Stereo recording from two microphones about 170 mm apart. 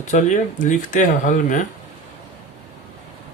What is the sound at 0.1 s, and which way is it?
Speech, 45° left (ahead or behind).